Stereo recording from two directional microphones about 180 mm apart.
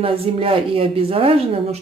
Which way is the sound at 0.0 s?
30° right (ahead or behind).